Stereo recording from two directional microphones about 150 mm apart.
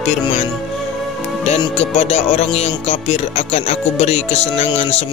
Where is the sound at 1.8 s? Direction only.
50° left (ahead or behind).